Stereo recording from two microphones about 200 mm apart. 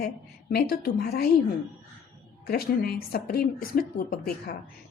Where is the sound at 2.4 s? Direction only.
50° left (ahead or behind).